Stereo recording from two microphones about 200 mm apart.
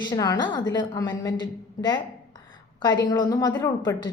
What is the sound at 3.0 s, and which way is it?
Speech, 20° left (ahead or behind).